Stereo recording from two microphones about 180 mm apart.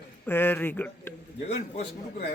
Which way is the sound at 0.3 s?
10° left (ahead or behind).